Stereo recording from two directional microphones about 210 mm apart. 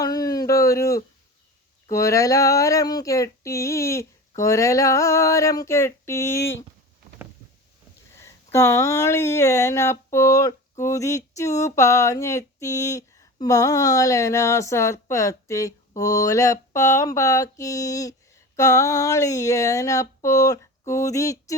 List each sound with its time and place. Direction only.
0.0 s a sound: 15° left (ahead or behind)
1.9 s speech: 15° left (ahead or behind)
8.1 s speech: 15° left (ahead or behind)